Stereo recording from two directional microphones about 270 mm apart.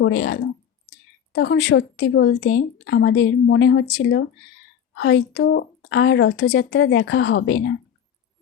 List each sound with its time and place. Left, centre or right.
0.0 s speech: left